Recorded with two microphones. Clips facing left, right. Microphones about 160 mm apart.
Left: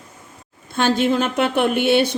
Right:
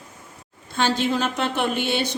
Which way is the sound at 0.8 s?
55° left (ahead or behind).